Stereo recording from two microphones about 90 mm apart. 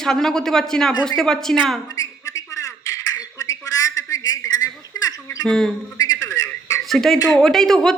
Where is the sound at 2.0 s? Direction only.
40° left (ahead or behind).